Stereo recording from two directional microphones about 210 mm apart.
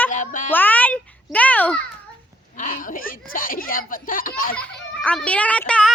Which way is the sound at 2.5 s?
40° left (ahead or behind).